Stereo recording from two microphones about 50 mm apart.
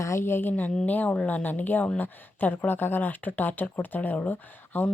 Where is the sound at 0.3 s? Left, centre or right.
Left.